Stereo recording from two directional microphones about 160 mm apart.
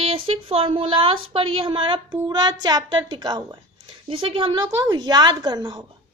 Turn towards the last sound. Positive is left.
turn(degrees=-30)  # may be behind; listen again after turning